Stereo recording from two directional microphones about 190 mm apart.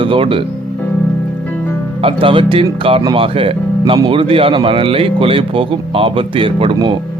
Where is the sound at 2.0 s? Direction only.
30° right (ahead or behind).